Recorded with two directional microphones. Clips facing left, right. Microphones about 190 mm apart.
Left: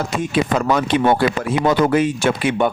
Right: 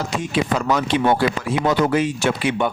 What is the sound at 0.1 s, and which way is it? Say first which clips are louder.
Speech: left 2 dB; 55° left (ahead or behind).